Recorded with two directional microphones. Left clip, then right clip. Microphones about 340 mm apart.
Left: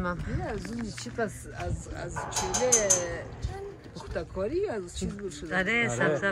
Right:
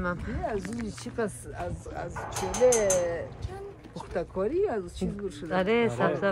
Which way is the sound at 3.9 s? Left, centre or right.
Right.